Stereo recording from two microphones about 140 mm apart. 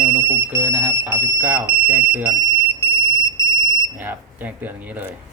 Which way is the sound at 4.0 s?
15° right (ahead or behind).